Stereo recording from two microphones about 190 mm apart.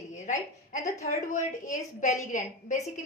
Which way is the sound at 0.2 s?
40° left (ahead or behind).